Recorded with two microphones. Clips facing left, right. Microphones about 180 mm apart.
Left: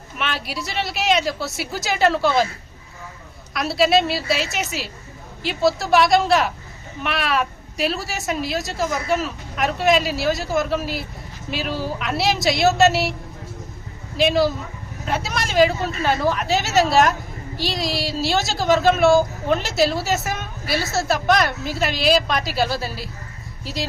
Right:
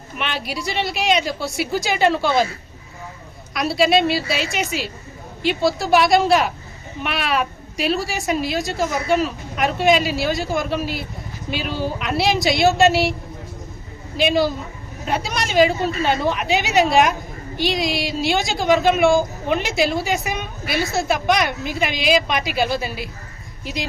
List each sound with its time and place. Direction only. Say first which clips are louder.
0.2 s a woman's voice: right 1 dB; centre (ahead or behind)
3.5 s a woman's voice: right 1 dB; centre (ahead or behind)
14.2 s a woman's voice: even; centre (ahead or behind)
16.0 s a woman's voice: left 3 dB; 25° right (ahead or behind)
20.0 s a woman's voice: right 1 dB; 5° left (ahead or behind)
20.3 s a sound: right 1 dB; 15° right (ahead or behind)
21.7 s a woman's voice: even; 15° right (ahead or behind)